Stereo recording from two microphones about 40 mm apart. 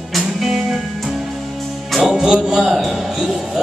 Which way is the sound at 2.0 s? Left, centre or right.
Centre.